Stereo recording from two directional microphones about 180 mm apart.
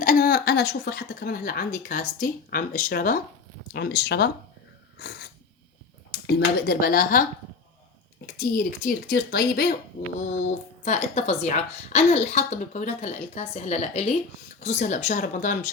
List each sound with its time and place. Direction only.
0.0 s a woman's voice: 50° left (ahead or behind)
3.7 s speech: 65° left (ahead or behind)
6.1 s speech: 60° left (ahead or behind)
8.4 s a woman's voice: 50° left (ahead or behind)
10.8 s a woman's voice: 40° left (ahead or behind)